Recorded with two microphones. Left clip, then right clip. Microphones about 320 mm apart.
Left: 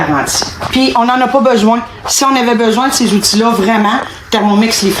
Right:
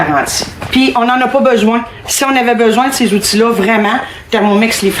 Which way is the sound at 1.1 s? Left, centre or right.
Left.